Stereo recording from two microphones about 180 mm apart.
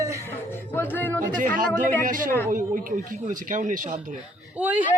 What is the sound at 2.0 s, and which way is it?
Speech, 50° right (ahead or behind).